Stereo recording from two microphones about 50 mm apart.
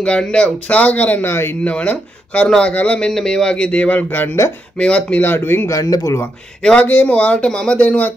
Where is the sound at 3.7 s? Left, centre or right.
Left.